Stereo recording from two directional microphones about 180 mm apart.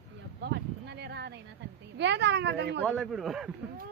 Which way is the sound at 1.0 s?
70° right (ahead or behind).